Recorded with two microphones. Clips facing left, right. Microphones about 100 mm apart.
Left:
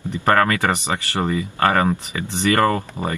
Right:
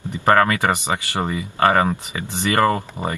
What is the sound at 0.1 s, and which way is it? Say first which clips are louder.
Speech: right 1 dB; 25° right (ahead or behind).